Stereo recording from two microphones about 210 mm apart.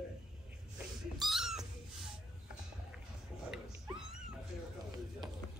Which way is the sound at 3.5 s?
5° right (ahead or behind).